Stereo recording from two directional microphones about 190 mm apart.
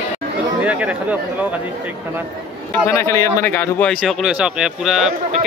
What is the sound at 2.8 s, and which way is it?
A man's voice, 15° left (ahead or behind).